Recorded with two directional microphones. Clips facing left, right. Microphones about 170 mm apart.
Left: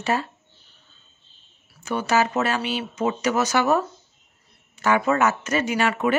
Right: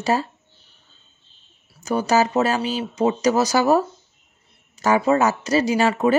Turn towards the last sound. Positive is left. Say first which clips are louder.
# right 4 dB
turn(degrees=-35)  # may be behind; listen again after turning